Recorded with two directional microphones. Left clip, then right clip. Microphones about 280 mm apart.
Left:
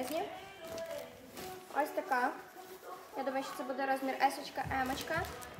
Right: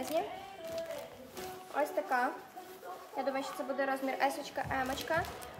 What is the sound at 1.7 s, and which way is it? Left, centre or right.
A woman's voice, centre.